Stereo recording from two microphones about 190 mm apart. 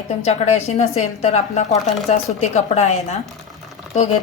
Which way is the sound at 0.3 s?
35° left (ahead or behind).